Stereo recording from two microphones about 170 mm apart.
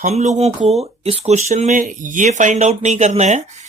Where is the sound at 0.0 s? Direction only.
45° right (ahead or behind).